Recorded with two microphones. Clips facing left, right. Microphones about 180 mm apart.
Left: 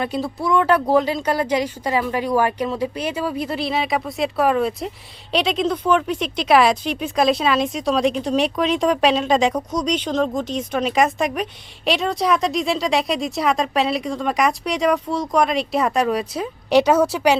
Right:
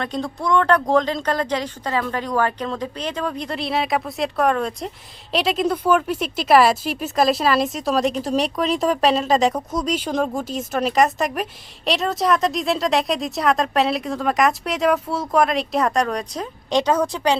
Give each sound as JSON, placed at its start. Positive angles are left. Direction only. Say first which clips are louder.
{"t": 0.0, "sound": "speech", "louder": "left 2 dB", "side_deg": 5}